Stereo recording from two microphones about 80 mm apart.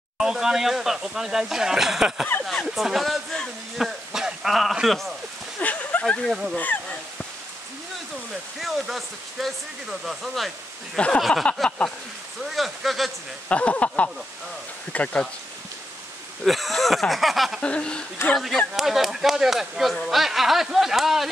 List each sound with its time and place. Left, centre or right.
0.2 s speech: centre
5.6 s a sound: centre
6.0 s speech: centre
6.5 s speech: centre
8.5 s speech: centre
13.5 s speech: centre
16.4 s speech: centre
17.6 s speech: centre
18.3 s speech: centre